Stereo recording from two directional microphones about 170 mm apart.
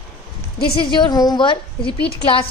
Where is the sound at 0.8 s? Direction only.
25° left (ahead or behind).